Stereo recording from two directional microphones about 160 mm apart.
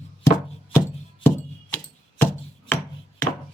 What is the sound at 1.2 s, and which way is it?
Music, 10° left (ahead or behind).